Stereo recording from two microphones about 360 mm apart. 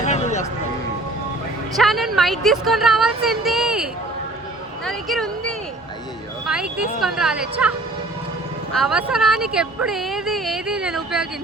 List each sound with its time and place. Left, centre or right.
0.0 s music: centre
1.7 s a woman's voice: centre
4.9 s speech: centre
6.4 s a sound: centre
7.0 s speech: centre
8.7 s speech: centre